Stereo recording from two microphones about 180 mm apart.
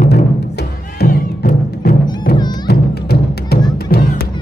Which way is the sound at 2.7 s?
60° left (ahead or behind).